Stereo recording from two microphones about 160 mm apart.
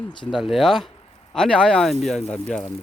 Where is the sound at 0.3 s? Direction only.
Centre (ahead or behind).